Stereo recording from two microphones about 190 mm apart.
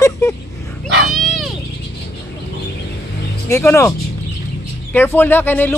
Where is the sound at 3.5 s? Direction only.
15° left (ahead or behind).